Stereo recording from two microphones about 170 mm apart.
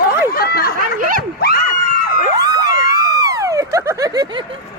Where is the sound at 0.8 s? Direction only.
55° right (ahead or behind).